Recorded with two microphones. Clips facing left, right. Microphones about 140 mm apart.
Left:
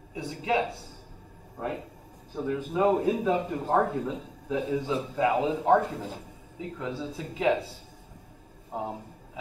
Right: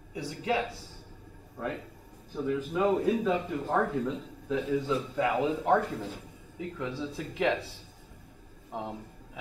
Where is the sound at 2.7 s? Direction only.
30° left (ahead or behind).